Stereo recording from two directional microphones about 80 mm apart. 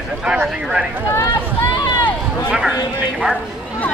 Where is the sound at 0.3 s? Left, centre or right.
Centre.